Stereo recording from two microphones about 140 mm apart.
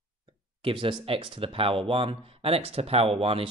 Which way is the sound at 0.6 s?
40° right (ahead or behind).